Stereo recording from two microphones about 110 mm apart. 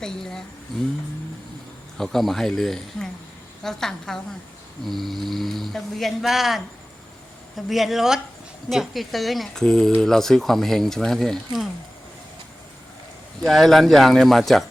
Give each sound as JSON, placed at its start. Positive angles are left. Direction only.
{"t": 0.0, "sound": "speech", "side_deg": 5}
{"t": 2.0, "sound": "speech", "side_deg": 0}
{"t": 13.4, "sound": "speech", "side_deg": 0}